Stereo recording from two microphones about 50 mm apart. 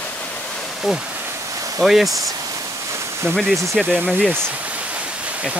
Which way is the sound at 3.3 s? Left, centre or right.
Centre.